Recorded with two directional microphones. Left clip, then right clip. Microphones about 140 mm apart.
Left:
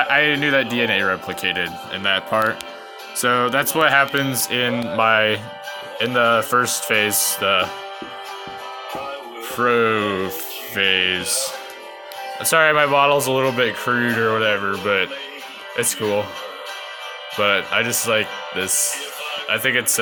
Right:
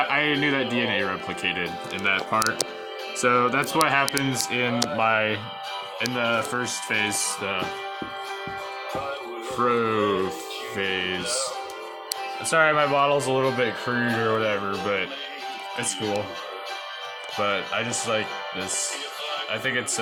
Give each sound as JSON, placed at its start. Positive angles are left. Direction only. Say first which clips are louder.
{"t": 0.0, "sound": "speech", "louder": "left 5 dB", "side_deg": 15}
{"t": 6.0, "sound": "speech", "louder": "left 8 dB", "side_deg": 25}
{"t": 9.6, "sound": "speech", "louder": "left 5 dB", "side_deg": 15}
{"t": 12.5, "sound": "speech", "louder": "left 5 dB", "side_deg": 20}
{"t": 14.7, "sound": "speech", "louder": "left 6 dB", "side_deg": 30}
{"t": 17.3, "sound": "speech", "louder": "left 7 dB", "side_deg": 30}